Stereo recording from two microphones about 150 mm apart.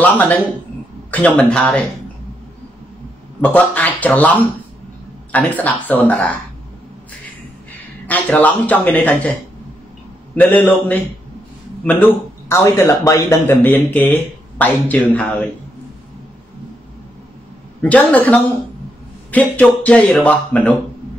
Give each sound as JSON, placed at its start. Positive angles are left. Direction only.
{"t": 0.0, "sound": "a man's voice", "side_deg": 10}
{"t": 3.3, "sound": "a man's voice", "side_deg": 10}
{"t": 7.7, "sound": "a man's voice", "side_deg": 10}
{"t": 17.8, "sound": "a man's voice", "side_deg": 10}